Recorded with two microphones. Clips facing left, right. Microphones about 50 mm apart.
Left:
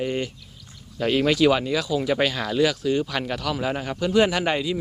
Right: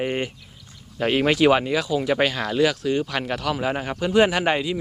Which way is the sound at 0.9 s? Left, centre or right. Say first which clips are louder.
Right 1 dB; centre.